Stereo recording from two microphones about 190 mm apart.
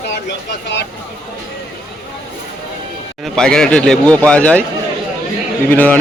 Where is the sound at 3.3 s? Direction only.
5° left (ahead or behind).